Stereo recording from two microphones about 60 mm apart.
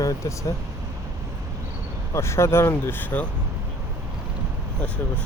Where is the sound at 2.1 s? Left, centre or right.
Left.